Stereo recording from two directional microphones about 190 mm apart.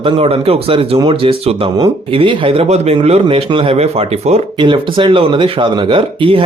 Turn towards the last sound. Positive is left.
turn(degrees=-30)  # may be behind; listen again after turning